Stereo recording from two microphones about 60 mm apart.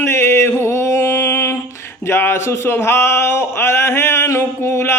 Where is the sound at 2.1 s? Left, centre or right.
Left.